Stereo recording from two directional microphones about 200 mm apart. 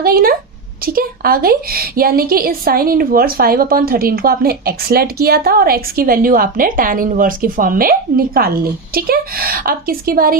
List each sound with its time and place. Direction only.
0.0 s a woman's voice: 45° right (ahead or behind)